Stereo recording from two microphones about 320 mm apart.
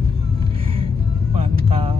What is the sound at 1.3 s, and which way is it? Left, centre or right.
Vehicle, centre.